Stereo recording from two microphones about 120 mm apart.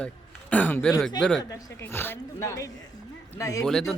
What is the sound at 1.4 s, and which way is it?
Speech, 25° left (ahead or behind).